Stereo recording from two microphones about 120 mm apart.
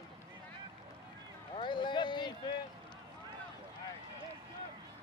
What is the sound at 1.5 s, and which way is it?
Speech, 40° left (ahead or behind).